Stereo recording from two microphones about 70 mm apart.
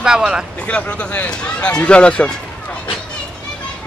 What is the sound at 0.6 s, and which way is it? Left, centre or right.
Speech, left.